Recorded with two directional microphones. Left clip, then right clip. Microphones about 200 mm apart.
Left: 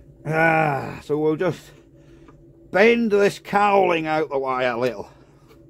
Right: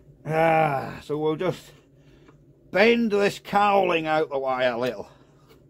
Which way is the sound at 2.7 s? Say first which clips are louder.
Left 3 dB; 15° left (ahead or behind).